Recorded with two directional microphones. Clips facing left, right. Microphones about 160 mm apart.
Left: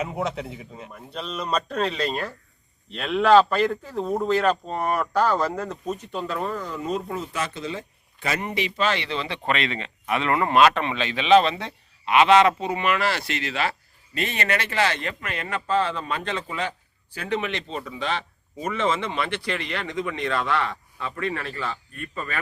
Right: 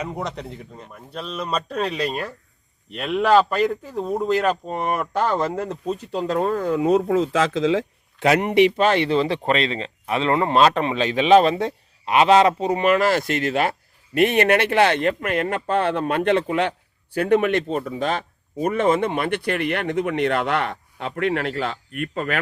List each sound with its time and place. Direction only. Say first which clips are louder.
0.0 s a man's voice: left 1 dB; centre (ahead or behind)
4.3 s speech: right 1 dB; 15° right (ahead or behind); by 6.5 s 40° right (ahead or behind)
6.5 s speech: right 9 dB; 60° right (ahead or behind)
8.8 s speech: right 7 dB; 50° right (ahead or behind); by 22.4 s 75° right (ahead or behind)